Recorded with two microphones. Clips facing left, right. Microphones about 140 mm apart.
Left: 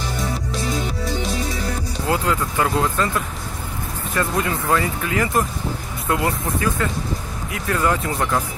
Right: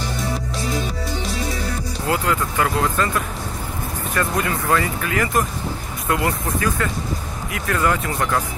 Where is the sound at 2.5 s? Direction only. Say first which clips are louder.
Even; 20° left (ahead or behind).